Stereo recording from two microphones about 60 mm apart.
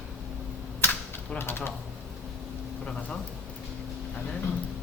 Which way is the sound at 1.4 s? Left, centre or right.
Left.